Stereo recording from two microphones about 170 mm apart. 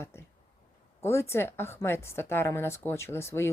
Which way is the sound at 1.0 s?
15° left (ahead or behind).